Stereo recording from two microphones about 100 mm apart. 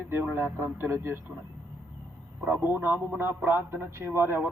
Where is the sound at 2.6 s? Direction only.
20° right (ahead or behind).